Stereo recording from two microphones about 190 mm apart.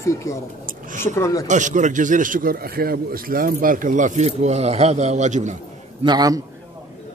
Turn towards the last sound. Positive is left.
turn(degrees=-20)  # may be behind; listen again after turning